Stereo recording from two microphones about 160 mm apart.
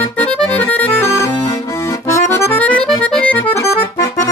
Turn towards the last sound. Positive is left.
turn(degrees=10)  # may be behind; listen again after turning